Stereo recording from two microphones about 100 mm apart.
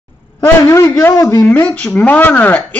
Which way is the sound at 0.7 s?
30° left (ahead or behind).